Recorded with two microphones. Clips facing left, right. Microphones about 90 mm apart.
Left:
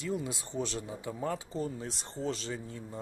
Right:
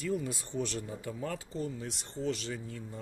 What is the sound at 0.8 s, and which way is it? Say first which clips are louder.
Speech: left 2 dB; 20° left (ahead or behind).